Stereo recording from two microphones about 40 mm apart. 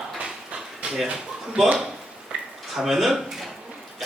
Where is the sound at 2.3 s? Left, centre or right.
Right.